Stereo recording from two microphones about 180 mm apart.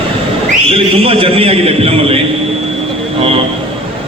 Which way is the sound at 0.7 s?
30° right (ahead or behind).